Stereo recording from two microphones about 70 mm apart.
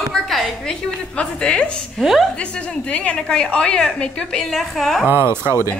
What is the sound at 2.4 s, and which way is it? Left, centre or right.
A woman's voice, centre.